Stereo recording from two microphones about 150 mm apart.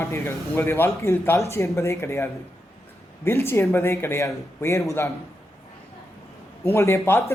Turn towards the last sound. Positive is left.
turn(degrees=20)  # may be behind; listen again after turning